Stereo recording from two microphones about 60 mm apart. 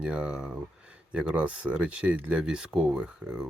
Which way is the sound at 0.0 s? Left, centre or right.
Centre.